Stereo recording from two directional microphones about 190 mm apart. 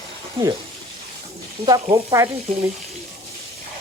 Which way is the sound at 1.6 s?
20° right (ahead or behind).